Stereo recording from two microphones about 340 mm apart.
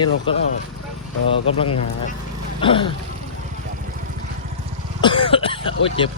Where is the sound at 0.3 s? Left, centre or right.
Centre.